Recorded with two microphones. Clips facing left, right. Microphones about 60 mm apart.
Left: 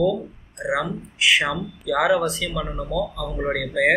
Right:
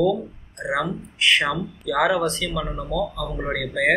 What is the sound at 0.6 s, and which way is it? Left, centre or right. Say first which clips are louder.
Speech: even; centre.